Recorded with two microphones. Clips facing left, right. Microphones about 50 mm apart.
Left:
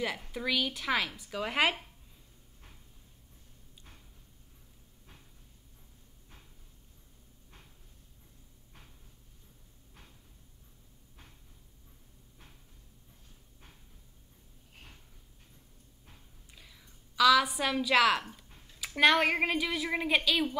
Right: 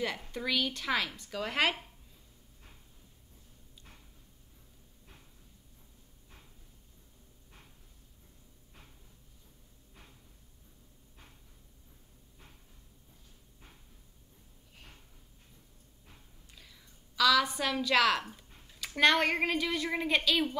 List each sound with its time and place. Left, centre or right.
0.3 s speech: centre
16.5 s a sound: centre
18.3 s a woman's voice: centre